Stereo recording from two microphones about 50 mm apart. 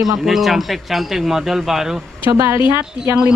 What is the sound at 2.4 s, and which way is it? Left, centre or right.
Speech, right.